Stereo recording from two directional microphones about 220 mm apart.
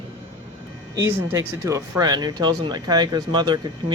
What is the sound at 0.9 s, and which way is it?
Speech, 15° right (ahead or behind).